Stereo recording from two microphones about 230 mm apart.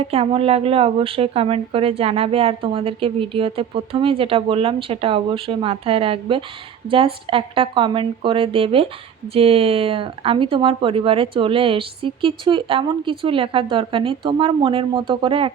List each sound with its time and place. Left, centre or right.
0.0 s a woman's voice: right